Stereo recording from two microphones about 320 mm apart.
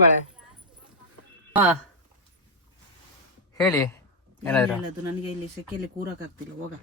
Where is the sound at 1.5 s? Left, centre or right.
Centre.